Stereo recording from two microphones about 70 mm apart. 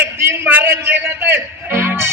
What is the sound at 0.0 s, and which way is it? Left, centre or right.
Music, right.